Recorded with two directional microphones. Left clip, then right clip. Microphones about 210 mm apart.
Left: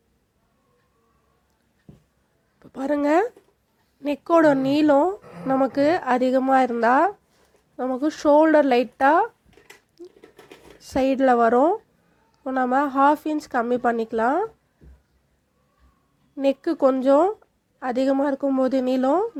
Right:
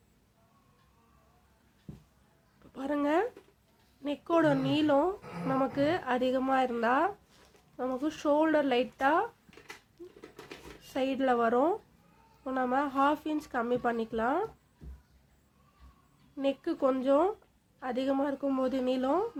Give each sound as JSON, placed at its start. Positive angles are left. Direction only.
{"t": 2.6, "sound": "a woman's voice", "side_deg": 30}
{"t": 10.8, "sound": "a woman's voice", "side_deg": 35}
{"t": 16.4, "sound": "a woman's voice", "side_deg": 35}